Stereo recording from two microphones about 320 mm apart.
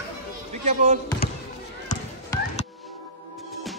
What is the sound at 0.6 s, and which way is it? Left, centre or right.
Speech, right.